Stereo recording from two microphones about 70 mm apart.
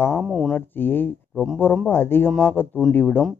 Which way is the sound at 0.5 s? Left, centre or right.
Left.